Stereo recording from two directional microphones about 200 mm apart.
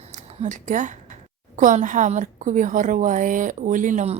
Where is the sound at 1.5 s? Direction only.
40° right (ahead or behind).